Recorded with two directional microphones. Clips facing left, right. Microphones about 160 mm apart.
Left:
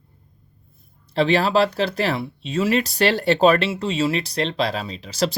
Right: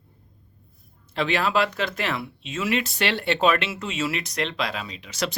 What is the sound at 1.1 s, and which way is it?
Speech, 35° left (ahead or behind).